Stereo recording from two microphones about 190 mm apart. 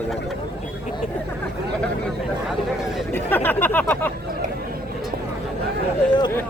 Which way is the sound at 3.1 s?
10° left (ahead or behind).